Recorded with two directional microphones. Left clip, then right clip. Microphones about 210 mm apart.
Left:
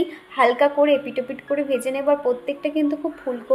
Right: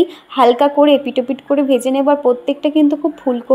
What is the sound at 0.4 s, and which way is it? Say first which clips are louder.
Speech: right 6 dB; 40° right (ahead or behind).